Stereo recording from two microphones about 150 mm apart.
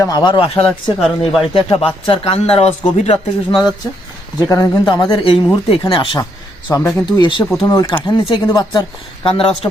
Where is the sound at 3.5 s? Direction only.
Centre (ahead or behind).